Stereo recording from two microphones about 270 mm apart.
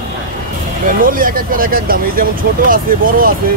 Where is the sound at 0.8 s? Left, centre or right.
Right.